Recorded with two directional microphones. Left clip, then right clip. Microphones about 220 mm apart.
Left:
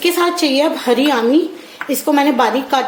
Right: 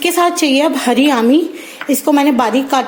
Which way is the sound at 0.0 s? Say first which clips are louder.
Right 2 dB; 35° right (ahead or behind).